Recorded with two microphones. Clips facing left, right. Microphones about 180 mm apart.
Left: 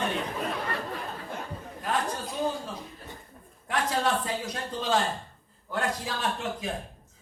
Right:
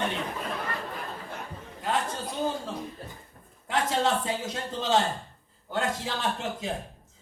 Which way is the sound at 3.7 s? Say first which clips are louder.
Right 1 dB; 25° right (ahead or behind).